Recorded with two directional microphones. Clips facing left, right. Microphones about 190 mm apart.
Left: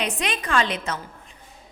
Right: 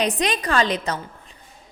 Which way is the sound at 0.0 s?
35° right (ahead or behind).